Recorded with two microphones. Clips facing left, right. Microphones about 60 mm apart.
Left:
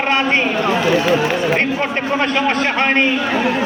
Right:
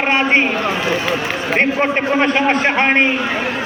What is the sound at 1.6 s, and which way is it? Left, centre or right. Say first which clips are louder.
A man's voice: right 3 dB; right.